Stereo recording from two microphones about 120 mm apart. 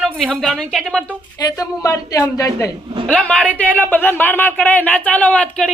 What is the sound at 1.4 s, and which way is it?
Speech, 30° left (ahead or behind).